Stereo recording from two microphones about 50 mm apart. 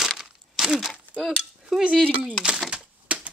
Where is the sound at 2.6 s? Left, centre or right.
Right.